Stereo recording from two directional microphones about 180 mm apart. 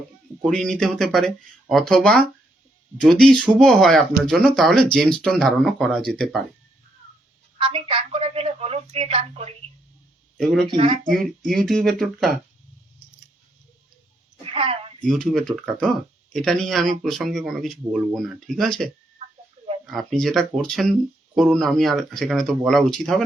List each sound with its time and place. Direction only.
0.5 s speech: 5° left (ahead or behind)
7.6 s a woman's voice: 30° right (ahead or behind)
10.3 s speech: centre (ahead or behind)
10.7 s a woman's voice: 30° right (ahead or behind)
11.1 s speech: centre (ahead or behind)
14.5 s a sound: 30° right (ahead or behind)
15.0 s speech: centre (ahead or behind)
19.8 s speech: centre (ahead or behind)